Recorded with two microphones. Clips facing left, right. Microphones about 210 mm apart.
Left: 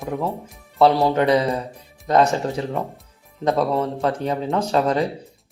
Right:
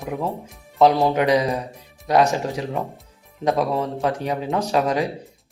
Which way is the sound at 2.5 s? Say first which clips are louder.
Left 1 dB; 15° right (ahead or behind).